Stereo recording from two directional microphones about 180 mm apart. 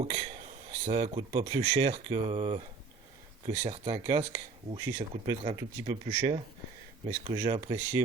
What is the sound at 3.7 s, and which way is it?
Speech, 30° right (ahead or behind).